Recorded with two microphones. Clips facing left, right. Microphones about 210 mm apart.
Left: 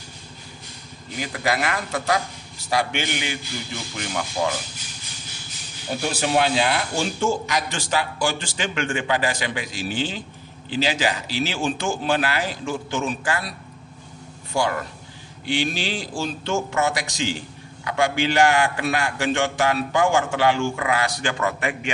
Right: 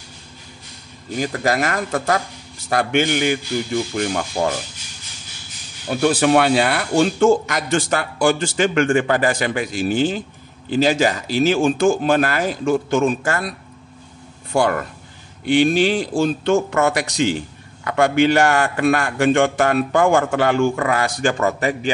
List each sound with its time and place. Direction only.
1.1 s speech: 45° right (ahead or behind)
5.9 s speech: 60° right (ahead or behind)
14.5 s a man's voice: 55° right (ahead or behind); by 21.9 s 40° right (ahead or behind)